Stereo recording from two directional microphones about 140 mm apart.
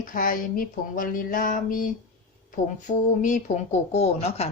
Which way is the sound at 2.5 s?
65° left (ahead or behind).